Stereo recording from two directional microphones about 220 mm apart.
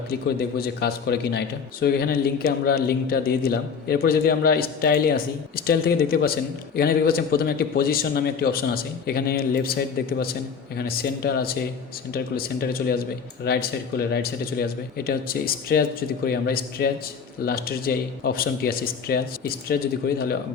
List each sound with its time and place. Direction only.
0.1 s a man's voice: 45° left (ahead or behind)